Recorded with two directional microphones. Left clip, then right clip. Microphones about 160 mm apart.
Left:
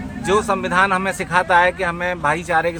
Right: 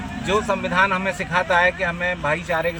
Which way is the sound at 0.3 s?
35° left (ahead or behind).